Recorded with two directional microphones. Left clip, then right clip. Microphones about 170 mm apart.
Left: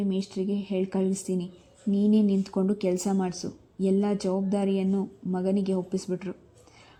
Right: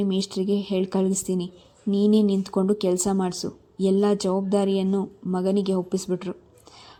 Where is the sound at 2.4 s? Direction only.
5° right (ahead or behind).